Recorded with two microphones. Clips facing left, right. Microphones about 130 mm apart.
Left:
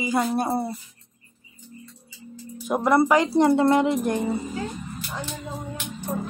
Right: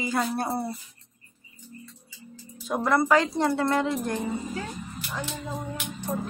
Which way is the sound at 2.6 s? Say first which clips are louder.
Left 4 dB; 15° left (ahead or behind).